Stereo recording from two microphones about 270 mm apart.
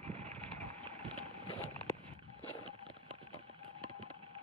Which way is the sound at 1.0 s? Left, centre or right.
Centre.